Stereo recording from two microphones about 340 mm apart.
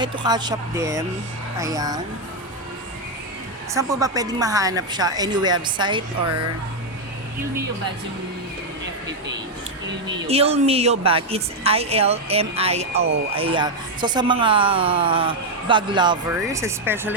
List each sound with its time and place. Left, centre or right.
0.0 s a woman's voice: centre
3.8 s a woman's voice: centre
10.2 s a woman's voice: centre